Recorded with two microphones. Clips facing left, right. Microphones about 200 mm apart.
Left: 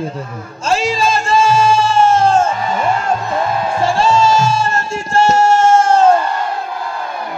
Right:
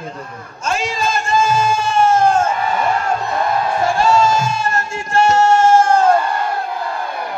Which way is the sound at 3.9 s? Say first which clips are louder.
Left 2 dB; 25° left (ahead or behind).